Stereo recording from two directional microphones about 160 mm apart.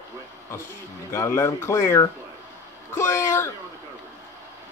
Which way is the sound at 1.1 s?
15° left (ahead or behind).